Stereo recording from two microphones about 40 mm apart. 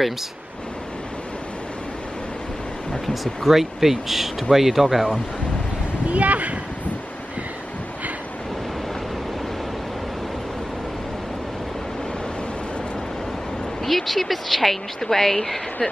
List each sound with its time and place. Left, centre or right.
3.1 s speech: centre
6.0 s speech: right
13.8 s speech: centre